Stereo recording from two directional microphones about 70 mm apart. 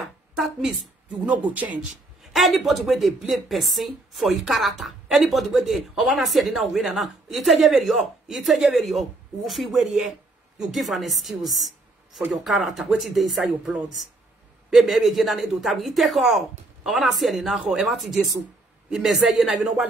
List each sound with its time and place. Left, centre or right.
0.4 s speech: centre
1.2 s speech: right
2.3 s speech: centre